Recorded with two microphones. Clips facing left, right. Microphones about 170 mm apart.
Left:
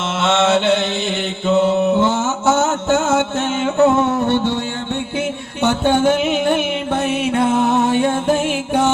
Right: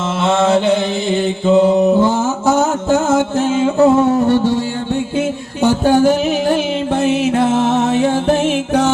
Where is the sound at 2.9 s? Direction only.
30° right (ahead or behind).